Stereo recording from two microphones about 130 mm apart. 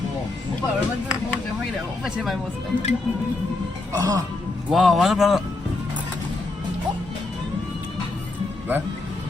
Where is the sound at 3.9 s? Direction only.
25° right (ahead or behind).